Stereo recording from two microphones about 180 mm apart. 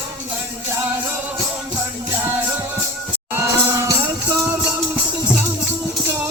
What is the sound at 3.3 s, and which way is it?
Music, 15° right (ahead or behind).